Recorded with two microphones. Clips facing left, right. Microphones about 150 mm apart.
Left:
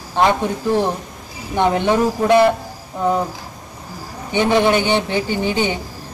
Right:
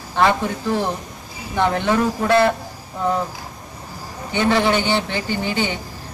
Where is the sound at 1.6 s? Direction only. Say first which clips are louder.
Left 3 dB; 20° left (ahead or behind).